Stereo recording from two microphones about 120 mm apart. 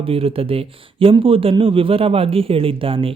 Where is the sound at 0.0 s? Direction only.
50° right (ahead or behind).